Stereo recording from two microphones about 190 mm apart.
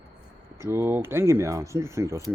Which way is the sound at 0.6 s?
15° right (ahead or behind).